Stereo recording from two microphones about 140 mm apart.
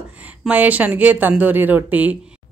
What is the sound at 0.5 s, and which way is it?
A woman's voice, 10° right (ahead or behind).